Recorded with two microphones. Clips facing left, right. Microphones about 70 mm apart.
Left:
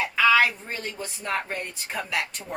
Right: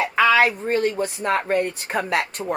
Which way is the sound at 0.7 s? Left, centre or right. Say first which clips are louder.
Right 13 dB; right.